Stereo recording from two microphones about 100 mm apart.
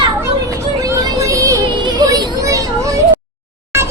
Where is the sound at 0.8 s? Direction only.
35° right (ahead or behind).